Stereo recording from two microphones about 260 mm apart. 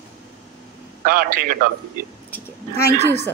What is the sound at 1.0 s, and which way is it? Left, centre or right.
Speech, right.